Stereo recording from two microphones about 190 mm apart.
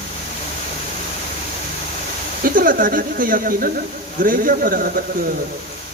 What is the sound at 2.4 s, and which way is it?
Speech, 45° right (ahead or behind).